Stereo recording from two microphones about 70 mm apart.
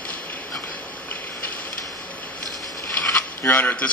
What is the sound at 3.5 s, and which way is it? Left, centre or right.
Speech, left.